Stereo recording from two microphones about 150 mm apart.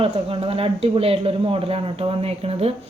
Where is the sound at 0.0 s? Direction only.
40° right (ahead or behind).